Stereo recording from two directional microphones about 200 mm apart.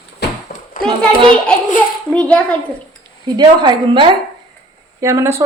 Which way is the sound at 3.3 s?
20° right (ahead or behind).